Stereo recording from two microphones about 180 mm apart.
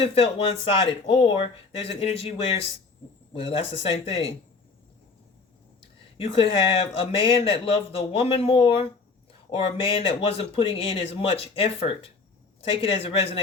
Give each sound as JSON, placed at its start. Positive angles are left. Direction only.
{"t": 0.0, "sound": "speech", "side_deg": 30}
{"t": 6.1, "sound": "speech", "side_deg": 30}